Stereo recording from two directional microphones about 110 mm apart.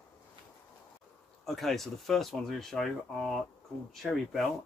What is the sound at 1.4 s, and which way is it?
Speech, centre (ahead or behind).